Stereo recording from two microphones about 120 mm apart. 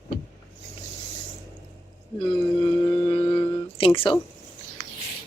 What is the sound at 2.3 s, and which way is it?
Speech, 45° left (ahead or behind).